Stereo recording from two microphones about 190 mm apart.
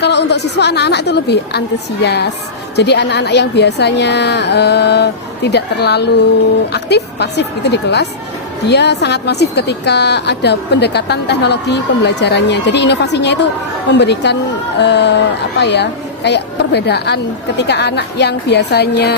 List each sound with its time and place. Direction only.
0.0 s a woman's voice: 65° left (ahead or behind)